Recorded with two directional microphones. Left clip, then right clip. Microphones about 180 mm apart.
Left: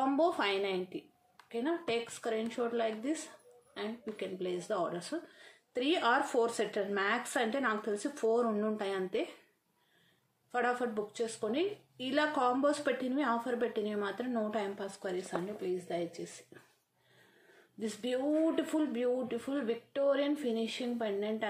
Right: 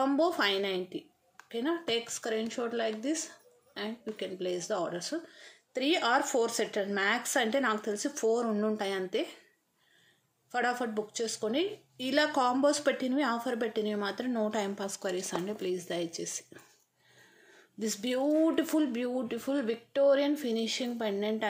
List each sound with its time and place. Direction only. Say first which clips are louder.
0.0 s speech: right 3 dB; 25° right (ahead or behind)
10.5 s a woman's voice: right 2 dB; 30° right (ahead or behind); by 16.4 s 45° right (ahead or behind)
17.7 s a woman's voice: right 3 dB; 35° right (ahead or behind)